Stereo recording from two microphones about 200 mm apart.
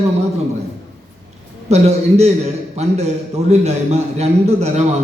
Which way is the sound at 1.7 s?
35° right (ahead or behind).